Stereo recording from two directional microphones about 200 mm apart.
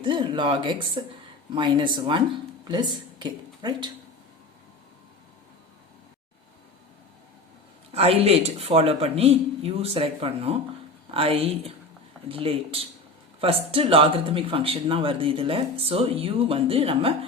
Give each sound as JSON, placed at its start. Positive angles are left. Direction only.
{"t": 0.0, "sound": "speech", "side_deg": -25}
{"t": 7.9, "sound": "speech", "side_deg": -30}